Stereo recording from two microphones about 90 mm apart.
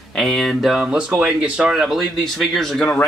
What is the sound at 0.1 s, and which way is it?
Speech, 5° left (ahead or behind).